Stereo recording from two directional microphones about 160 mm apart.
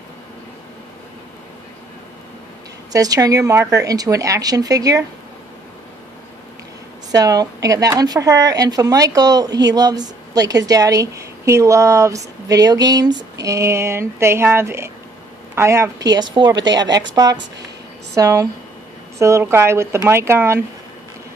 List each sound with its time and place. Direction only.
2.9 s speech: 20° right (ahead or behind)
7.1 s a woman's voice: 25° right (ahead or behind)